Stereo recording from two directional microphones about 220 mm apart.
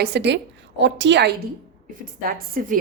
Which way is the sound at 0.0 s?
50° right (ahead or behind).